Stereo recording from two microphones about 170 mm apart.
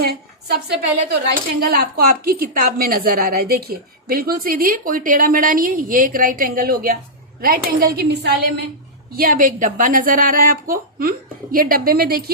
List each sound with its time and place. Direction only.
0.0 s a sound: 70° right (ahead or behind)
1.1 s a woman's voice: 60° right (ahead or behind)
9.1 s speech: 55° right (ahead or behind)